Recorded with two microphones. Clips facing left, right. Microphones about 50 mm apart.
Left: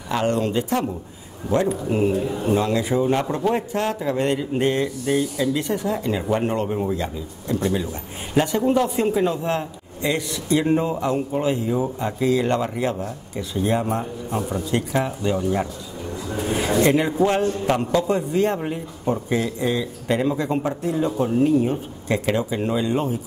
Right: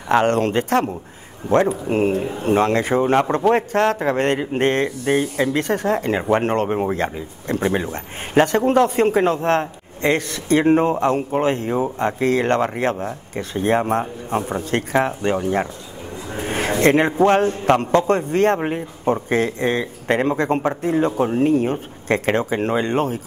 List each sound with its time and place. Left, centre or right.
0.1 s a man's voice: right
1.5 s a man's voice: right
16.3 s a sound: right
16.8 s a man's voice: right
17.6 s a man's voice: right